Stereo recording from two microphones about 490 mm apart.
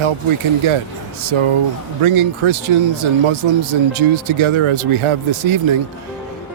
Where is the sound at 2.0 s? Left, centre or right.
Right.